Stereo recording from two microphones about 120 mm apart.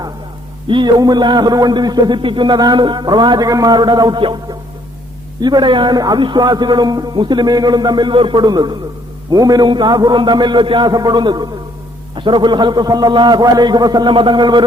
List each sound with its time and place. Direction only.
0.7 s a man's voice: 40° right (ahead or behind)